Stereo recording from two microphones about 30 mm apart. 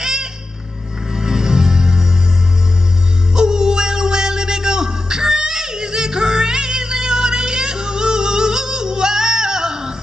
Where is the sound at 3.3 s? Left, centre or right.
Right.